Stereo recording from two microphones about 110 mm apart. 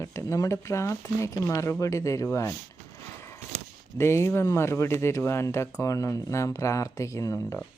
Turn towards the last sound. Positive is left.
turn(degrees=25)  # may be behind; listen again after turning